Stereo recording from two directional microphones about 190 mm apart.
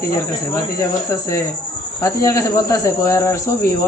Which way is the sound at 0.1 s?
15° left (ahead or behind).